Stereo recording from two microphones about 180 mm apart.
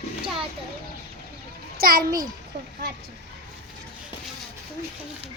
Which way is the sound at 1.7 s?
55° right (ahead or behind).